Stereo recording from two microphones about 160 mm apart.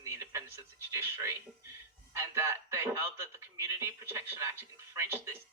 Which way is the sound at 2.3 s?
15° right (ahead or behind).